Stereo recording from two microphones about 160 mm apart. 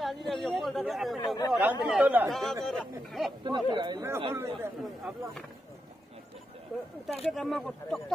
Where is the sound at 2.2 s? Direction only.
Centre (ahead or behind).